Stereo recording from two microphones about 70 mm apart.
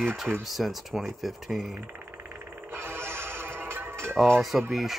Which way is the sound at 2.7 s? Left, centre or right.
Right.